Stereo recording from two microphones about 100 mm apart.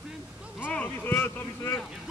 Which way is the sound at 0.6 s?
15° left (ahead or behind).